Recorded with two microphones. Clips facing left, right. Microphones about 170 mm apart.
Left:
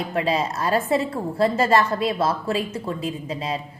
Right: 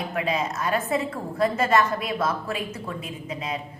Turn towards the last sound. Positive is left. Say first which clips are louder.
# left 4 dB
turn(degrees=30)  # may be behind; listen again after turning